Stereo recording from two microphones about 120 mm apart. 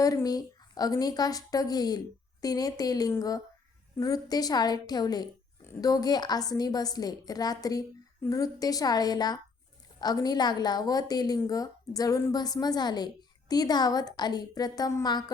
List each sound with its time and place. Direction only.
0.0 s a woman's voice: 30° left (ahead or behind)